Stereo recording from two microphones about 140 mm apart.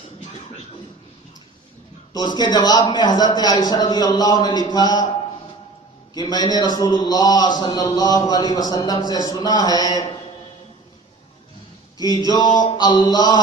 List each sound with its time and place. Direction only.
2.1 s a man's voice: 30° left (ahead or behind)
6.1 s a man's voice: 30° left (ahead or behind)
11.9 s a man's voice: 30° left (ahead or behind)